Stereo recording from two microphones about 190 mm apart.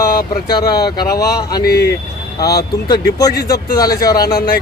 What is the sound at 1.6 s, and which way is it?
Speech, 60° left (ahead or behind).